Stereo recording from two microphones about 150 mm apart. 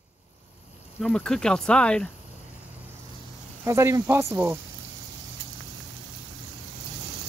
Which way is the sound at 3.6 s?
20° right (ahead or behind).